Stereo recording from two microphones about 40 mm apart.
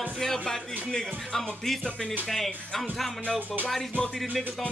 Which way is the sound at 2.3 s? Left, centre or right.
Centre.